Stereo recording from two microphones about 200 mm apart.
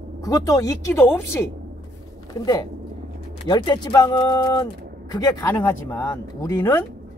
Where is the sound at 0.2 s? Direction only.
15° left (ahead or behind).